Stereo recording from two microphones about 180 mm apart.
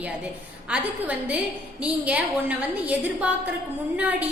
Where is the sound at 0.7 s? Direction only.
10° right (ahead or behind).